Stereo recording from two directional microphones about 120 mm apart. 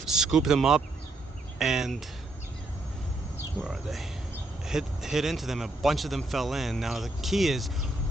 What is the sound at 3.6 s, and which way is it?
A man's voice, centre (ahead or behind).